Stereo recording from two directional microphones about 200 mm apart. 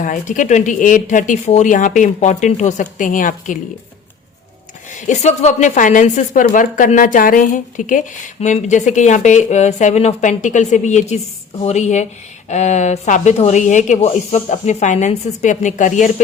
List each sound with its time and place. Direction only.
0.0 s speech: 40° left (ahead or behind)
4.9 s speech: 40° left (ahead or behind)